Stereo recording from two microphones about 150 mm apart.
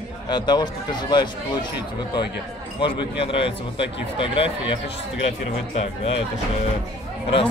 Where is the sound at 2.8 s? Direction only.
35° left (ahead or behind).